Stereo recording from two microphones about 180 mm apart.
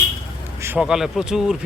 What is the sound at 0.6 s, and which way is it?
Speech, 10° right (ahead or behind).